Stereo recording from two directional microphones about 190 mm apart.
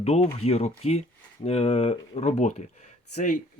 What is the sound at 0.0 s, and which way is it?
Speech, 35° left (ahead or behind).